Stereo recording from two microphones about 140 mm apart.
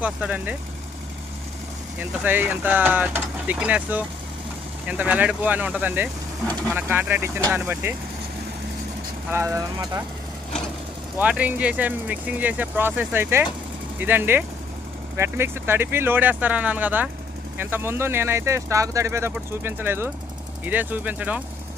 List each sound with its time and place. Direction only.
0.0 s speech: 10° right (ahead or behind)
2.2 s speech: 15° right (ahead or behind)
9.3 s speech: 20° right (ahead or behind)
11.2 s speech: 10° right (ahead or behind)